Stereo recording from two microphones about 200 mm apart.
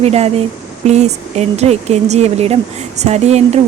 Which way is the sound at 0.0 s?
30° right (ahead or behind).